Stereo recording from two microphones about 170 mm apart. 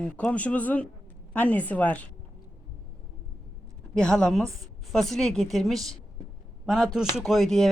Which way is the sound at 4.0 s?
5° left (ahead or behind).